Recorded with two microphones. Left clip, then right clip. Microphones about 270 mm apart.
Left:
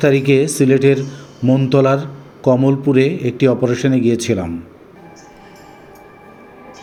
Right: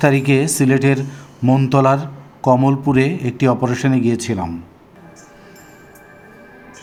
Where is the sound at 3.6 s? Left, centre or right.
Right.